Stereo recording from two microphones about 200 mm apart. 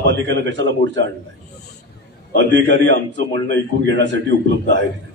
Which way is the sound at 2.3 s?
65° right (ahead or behind).